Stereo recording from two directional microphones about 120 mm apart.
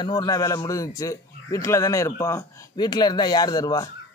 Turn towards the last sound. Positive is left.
turn(degrees=35)  # may be behind; listen again after turning